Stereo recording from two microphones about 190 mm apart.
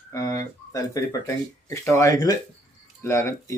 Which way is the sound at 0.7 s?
20° left (ahead or behind).